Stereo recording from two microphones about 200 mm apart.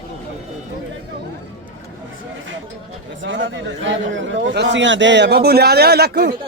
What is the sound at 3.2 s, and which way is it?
A man's voice, 70° right (ahead or behind).